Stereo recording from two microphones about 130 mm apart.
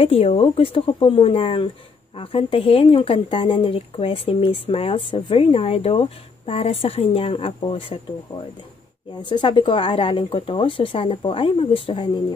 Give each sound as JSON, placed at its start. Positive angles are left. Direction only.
{"t": 0.0, "sound": "speech", "side_deg": 50}
{"t": 9.3, "sound": "speech", "side_deg": 40}